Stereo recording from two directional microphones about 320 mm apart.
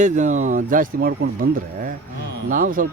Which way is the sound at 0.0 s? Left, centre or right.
Right.